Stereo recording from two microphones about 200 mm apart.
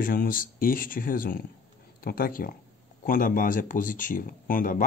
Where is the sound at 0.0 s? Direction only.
45° left (ahead or behind).